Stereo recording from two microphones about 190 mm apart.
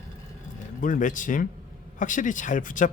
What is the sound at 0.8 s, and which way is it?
A man's voice, 45° left (ahead or behind).